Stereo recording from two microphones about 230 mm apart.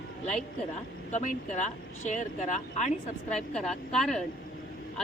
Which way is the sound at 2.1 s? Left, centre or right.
Left.